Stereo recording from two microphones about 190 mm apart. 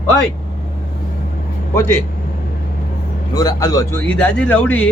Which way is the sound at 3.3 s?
20° left (ahead or behind).